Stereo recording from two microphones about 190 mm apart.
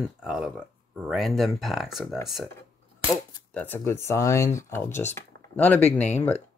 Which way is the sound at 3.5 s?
10° left (ahead or behind).